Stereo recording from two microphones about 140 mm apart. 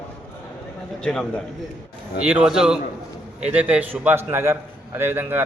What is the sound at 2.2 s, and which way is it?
A man's voice, 5° right (ahead or behind).